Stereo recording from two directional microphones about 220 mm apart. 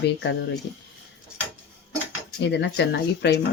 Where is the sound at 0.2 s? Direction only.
55° left (ahead or behind).